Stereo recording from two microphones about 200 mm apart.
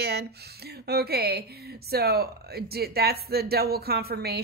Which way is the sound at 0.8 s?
50° right (ahead or behind).